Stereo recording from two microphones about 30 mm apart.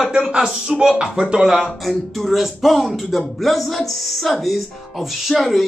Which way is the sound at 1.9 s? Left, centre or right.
Centre.